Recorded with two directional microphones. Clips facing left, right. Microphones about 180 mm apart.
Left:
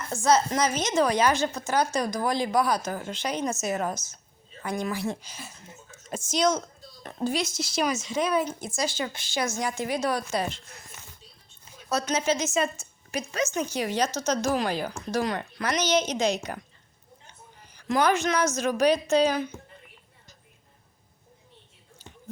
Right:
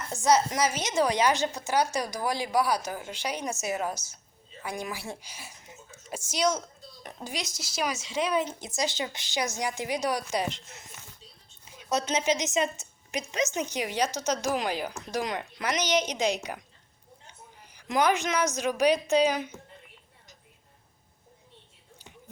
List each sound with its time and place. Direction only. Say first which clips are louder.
0.1 s a woman's voice: left 1 dB; 15° right (ahead or behind)
17.7 s a woman's voice: left 2 dB; 15° right (ahead or behind)